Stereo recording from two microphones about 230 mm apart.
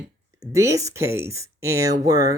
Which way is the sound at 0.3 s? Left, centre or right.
Centre.